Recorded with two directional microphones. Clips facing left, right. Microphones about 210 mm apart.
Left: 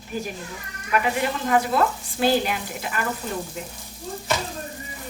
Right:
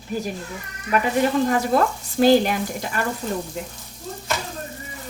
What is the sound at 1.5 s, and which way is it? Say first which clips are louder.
Frying: right 1 dB; 45° right (ahead or behind).